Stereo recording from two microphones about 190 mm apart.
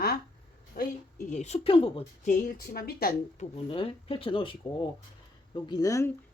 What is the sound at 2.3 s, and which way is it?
A woman's voice, 50° left (ahead or behind).